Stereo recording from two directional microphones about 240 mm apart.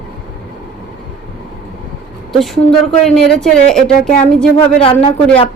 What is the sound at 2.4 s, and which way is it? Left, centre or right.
A woman's voice, centre.